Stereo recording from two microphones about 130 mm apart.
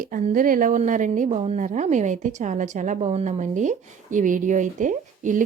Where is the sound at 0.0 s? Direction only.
90° right.